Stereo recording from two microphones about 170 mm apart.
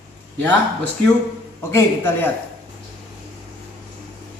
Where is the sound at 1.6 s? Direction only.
15° left (ahead or behind).